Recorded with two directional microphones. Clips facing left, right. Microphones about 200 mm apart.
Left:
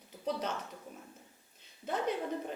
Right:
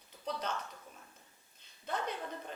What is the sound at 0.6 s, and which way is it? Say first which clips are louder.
Speech: left 4 dB; 20° left (ahead or behind).